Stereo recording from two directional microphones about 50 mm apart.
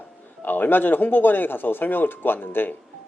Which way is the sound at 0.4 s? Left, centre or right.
Left.